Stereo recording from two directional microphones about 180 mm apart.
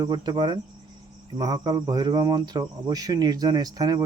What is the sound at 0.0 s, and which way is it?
Speech, 25° right (ahead or behind).